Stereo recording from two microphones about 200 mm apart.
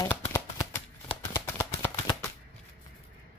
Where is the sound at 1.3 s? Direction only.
10° left (ahead or behind).